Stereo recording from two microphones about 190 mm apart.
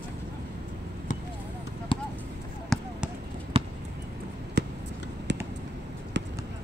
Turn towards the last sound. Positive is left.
turn(degrees=-70)  # may be behind; listen again after turning